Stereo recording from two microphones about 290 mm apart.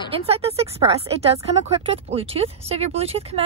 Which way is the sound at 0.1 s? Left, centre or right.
Right.